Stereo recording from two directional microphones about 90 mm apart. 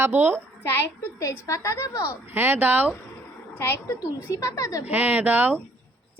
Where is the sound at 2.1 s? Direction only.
25° right (ahead or behind).